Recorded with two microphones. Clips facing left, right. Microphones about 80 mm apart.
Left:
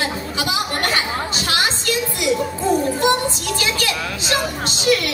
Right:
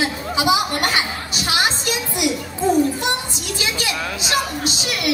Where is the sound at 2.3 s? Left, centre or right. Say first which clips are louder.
Left 2 dB; left.